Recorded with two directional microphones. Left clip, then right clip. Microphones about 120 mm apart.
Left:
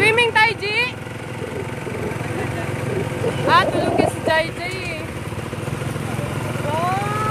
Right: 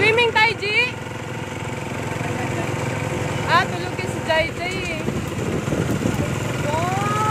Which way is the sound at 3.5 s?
40° left (ahead or behind).